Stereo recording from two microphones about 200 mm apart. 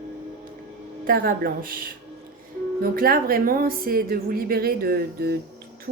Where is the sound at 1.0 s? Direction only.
45° right (ahead or behind).